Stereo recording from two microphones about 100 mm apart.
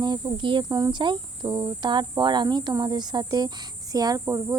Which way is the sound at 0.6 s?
40° right (ahead or behind).